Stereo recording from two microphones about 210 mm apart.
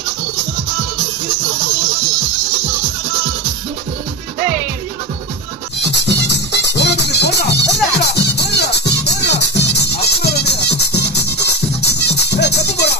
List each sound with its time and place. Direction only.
5.8 s music: 55° left (ahead or behind)